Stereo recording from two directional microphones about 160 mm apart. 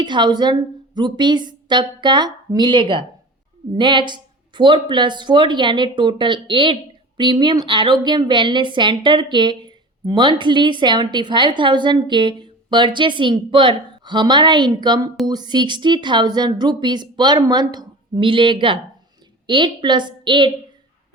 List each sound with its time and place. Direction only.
0.0 s a woman's voice: 30° right (ahead or behind)